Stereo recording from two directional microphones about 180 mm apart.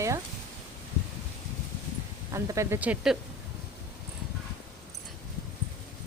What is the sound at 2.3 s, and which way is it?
Speech, 15° right (ahead or behind).